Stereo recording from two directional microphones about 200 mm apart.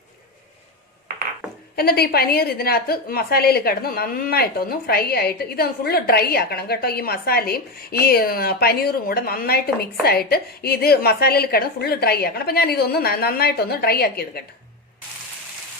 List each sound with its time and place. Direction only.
1.7 s a woman's voice: 50° left (ahead or behind)